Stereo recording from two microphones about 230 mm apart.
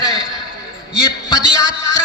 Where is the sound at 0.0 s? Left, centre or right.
Centre.